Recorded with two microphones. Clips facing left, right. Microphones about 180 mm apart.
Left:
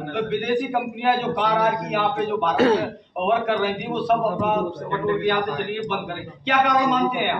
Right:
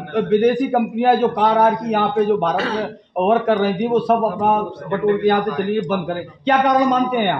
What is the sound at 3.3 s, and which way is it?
A man's voice, 40° right (ahead or behind).